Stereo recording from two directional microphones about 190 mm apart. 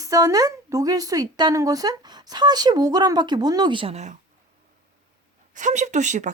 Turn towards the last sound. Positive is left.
turn(degrees=-40)  # may be behind; listen again after turning